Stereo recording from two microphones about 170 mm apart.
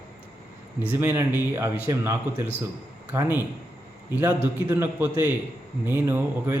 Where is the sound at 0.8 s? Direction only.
15° right (ahead or behind).